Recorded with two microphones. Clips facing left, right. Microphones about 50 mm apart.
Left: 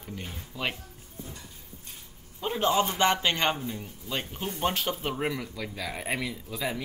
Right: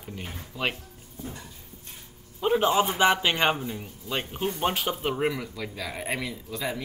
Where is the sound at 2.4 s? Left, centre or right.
Centre.